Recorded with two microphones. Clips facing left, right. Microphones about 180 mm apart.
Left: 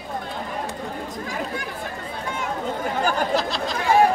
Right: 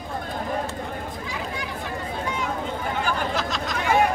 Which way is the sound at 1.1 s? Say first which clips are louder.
Left 3 dB; 50° left (ahead or behind).